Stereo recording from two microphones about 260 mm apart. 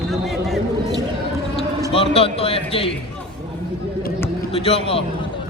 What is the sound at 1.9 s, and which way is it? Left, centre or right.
Speech, left.